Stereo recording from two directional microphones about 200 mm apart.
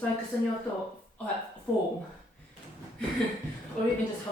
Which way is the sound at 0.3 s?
10° left (ahead or behind).